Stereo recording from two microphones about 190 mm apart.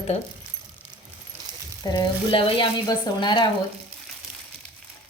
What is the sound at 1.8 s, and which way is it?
Speech, 20° left (ahead or behind).